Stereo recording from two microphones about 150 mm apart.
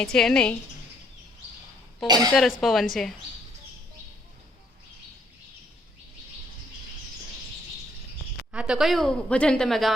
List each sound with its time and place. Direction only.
0.0 s a woman's voice: 5° left (ahead or behind)
2.0 s speech: 25° right (ahead or behind)
2.3 s a woman's voice: centre (ahead or behind)
8.5 s a woman's voice: 5° right (ahead or behind)